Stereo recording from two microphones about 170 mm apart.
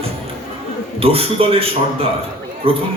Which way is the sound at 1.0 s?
35° right (ahead or behind).